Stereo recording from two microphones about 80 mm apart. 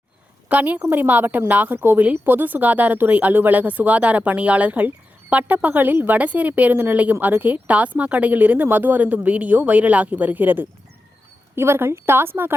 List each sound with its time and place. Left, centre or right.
0.4 s a woman's voice: centre